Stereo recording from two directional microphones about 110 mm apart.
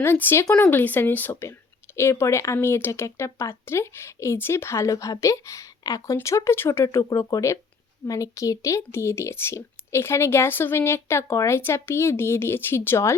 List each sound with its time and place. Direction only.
0.0 s speech: 20° left (ahead or behind)